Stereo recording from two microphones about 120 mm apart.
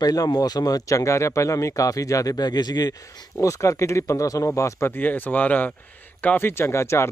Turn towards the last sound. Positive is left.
turn(degrees=20)  # may be behind; listen again after turning